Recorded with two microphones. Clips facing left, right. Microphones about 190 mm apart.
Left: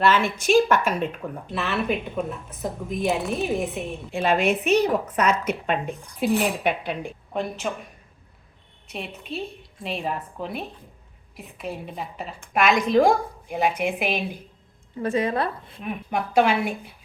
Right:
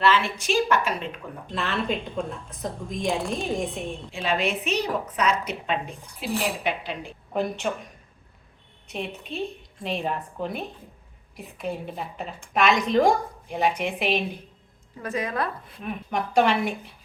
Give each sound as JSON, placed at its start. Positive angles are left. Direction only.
{"t": 0.0, "sound": "a woman's voice", "side_deg": 45}
{"t": 1.5, "sound": "a woman's voice", "side_deg": 5}
{"t": 4.1, "sound": "a woman's voice", "side_deg": 50}
{"t": 7.3, "sound": "a woman's voice", "side_deg": 0}
{"t": 8.9, "sound": "a woman's voice", "side_deg": 0}
{"t": 15.0, "sound": "a woman's voice", "side_deg": 30}
{"t": 15.8, "sound": "a woman's voice", "side_deg": 5}